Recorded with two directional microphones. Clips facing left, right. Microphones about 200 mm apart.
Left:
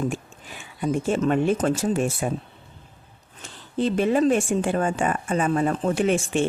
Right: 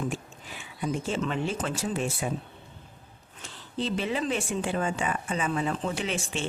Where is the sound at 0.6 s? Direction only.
50° left (ahead or behind).